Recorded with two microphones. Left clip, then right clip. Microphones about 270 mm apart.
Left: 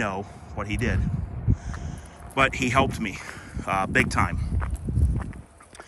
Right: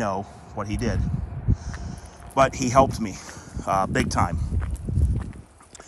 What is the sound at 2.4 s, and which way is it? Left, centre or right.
Speech, centre.